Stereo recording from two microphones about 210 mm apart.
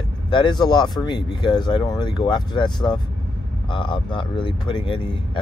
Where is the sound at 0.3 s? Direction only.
20° left (ahead or behind).